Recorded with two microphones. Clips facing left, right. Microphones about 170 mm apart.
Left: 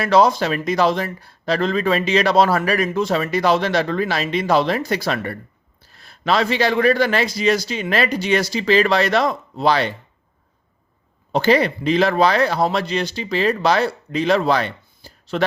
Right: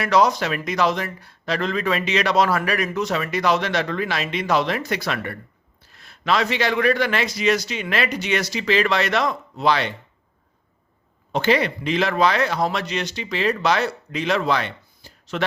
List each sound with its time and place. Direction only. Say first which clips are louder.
0.0 s speech: left 3 dB; 30° left (ahead or behind)
11.3 s speech: left 4 dB; 35° left (ahead or behind)